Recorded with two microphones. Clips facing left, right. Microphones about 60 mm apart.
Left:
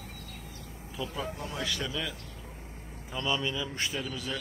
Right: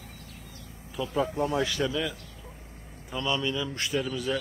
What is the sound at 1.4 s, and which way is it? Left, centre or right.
Speech, right.